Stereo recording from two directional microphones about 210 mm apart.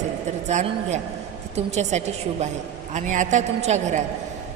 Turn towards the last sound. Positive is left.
turn(degrees=-35)  # may be behind; listen again after turning